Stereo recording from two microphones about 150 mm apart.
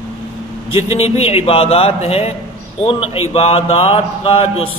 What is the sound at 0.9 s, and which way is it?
A man's voice, 45° left (ahead or behind).